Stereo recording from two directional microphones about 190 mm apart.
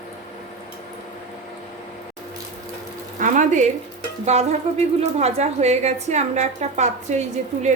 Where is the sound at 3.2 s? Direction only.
40° right (ahead or behind).